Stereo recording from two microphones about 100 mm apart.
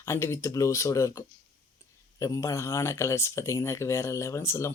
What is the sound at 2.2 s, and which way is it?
Speech, 35° left (ahead or behind).